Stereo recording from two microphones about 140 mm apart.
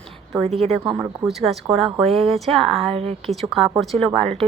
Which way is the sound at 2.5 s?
Centre (ahead or behind).